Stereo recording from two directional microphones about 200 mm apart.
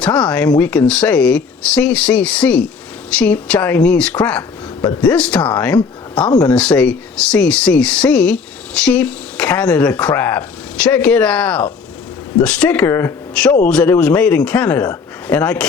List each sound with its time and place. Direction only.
0.0 s speech: 5° left (ahead or behind)
4.8 s speech: 20° left (ahead or behind)
5.0 s speech: 5° left (ahead or behind)